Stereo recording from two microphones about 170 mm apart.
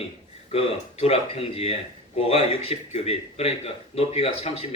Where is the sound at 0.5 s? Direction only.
35° left (ahead or behind).